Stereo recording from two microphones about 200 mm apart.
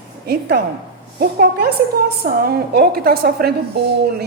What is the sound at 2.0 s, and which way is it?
A woman's voice, 50° right (ahead or behind).